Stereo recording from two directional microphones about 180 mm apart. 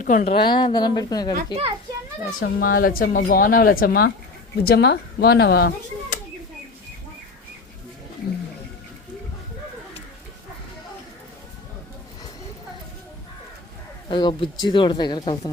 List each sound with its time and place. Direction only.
0.0 s a woman's voice: 45° left (ahead or behind)
0.3 s speech: 25° left (ahead or behind)
2.4 s speech: 55° left (ahead or behind)
14.1 s speech: 25° left (ahead or behind)